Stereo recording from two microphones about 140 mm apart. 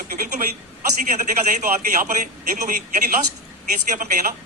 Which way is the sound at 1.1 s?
70° right (ahead or behind).